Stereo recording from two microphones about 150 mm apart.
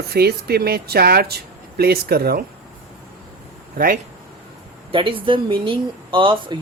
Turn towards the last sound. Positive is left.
turn(degrees=-35)  # may be behind; listen again after turning